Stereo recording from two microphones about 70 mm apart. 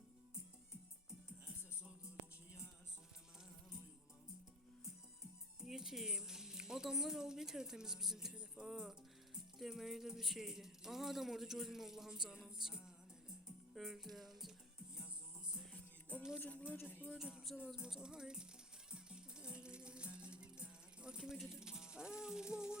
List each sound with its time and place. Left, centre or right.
5.5 s speech: centre
15.7 s music: left
16.4 s speech: left
17.2 s speech: centre
18.9 s music: centre